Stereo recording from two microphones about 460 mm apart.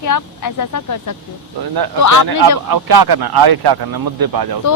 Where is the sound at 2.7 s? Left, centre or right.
Right.